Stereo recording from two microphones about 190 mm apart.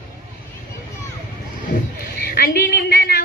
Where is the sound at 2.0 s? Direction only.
55° left (ahead or behind).